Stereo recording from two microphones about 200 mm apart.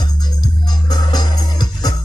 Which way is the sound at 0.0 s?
20° left (ahead or behind).